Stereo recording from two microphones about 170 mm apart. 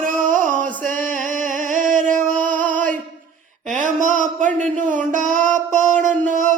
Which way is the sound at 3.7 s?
50° right (ahead or behind).